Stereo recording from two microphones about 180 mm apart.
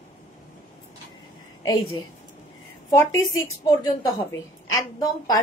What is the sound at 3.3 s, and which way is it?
A woman's voice, 20° left (ahead or behind).